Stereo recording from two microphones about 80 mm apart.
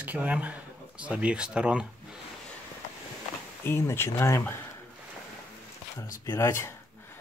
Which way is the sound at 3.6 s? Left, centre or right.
Left.